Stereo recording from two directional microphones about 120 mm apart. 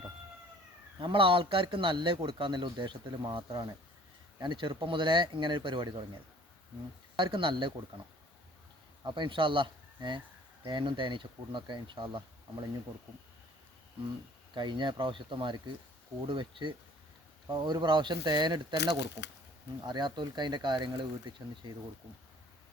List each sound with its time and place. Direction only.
0.9 s a man's voice: 45° right (ahead or behind)
7.2 s a man's voice: 45° right (ahead or behind)
9.0 s a man's voice: 40° right (ahead or behind)
14.5 s a man's voice: 40° right (ahead or behind)